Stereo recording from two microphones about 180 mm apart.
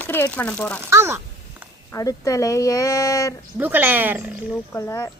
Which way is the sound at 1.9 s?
20° left (ahead or behind).